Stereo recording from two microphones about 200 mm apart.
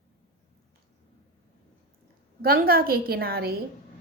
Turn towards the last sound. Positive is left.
turn(degrees=-50)  # may be behind; listen again after turning